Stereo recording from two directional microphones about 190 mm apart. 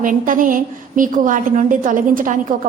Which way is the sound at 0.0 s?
45° right (ahead or behind).